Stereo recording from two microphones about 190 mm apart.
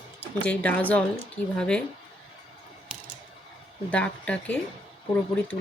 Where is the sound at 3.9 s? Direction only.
5° left (ahead or behind).